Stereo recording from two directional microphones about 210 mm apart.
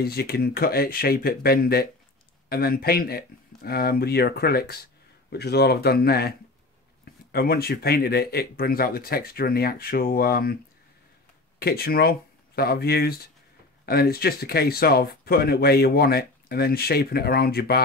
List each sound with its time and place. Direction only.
0.0 s speech: 45° left (ahead or behind)
7.3 s speech: 45° left (ahead or behind)
11.6 s speech: 45° left (ahead or behind)